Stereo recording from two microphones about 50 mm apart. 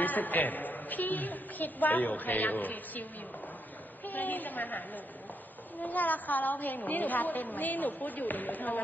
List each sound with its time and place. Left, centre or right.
0.0 s a woman's voice: left